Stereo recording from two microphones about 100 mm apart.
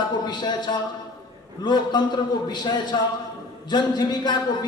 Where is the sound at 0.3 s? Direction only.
45° left (ahead or behind).